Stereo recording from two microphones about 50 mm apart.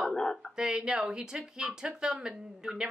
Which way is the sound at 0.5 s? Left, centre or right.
Centre.